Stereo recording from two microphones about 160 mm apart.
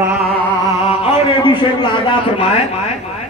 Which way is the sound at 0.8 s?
40° left (ahead or behind).